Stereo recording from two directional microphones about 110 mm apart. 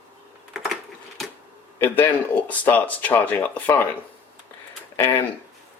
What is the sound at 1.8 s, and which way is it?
Speech, 15° left (ahead or behind).